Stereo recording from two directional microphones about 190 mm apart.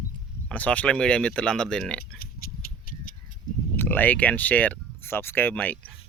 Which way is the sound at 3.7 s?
10° left (ahead or behind).